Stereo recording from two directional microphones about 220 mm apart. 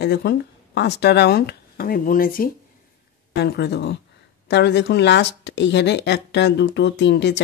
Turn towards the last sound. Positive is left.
turn(degrees=50)  # may be behind; listen again after turning